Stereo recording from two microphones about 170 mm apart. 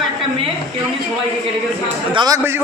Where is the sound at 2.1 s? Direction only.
25° right (ahead or behind).